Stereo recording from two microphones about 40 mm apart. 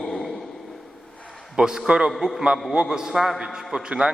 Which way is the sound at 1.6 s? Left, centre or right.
Centre.